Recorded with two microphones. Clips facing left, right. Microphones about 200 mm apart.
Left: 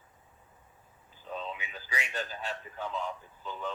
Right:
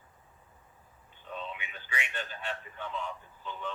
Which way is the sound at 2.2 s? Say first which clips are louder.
Left 2 dB; 40° left (ahead or behind).